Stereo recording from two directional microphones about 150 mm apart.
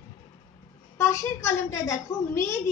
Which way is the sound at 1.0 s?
20° left (ahead or behind).